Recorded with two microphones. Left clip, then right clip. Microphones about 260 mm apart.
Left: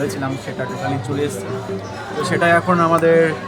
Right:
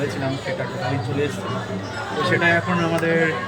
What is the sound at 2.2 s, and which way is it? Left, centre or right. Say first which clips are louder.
Speech: left 4 dB; centre.